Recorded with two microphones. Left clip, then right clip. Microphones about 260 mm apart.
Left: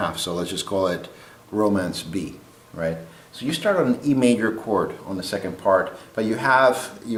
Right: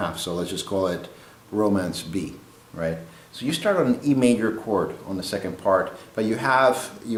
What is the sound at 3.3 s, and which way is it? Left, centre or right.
Speech, centre.